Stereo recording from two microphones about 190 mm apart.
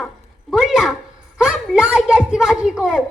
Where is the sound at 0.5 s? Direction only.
Centre (ahead or behind).